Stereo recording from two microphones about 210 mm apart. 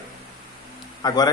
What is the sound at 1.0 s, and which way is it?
Speech, 20° left (ahead or behind).